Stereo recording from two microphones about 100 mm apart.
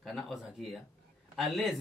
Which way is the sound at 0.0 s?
Centre (ahead or behind).